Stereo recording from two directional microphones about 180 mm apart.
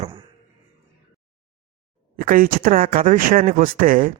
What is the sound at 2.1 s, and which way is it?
Speech, 50° right (ahead or behind).